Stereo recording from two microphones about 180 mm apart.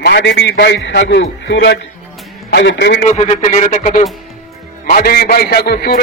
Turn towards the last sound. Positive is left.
turn(degrees=60)  # may be behind; listen again after turning